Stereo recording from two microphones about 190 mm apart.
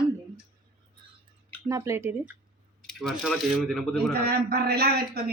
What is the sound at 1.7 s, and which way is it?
Speech, 15° right (ahead or behind).